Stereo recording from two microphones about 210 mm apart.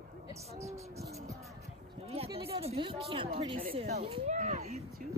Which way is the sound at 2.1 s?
25° right (ahead or behind).